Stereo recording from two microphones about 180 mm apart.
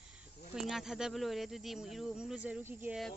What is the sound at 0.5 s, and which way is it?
Speech, centre (ahead or behind).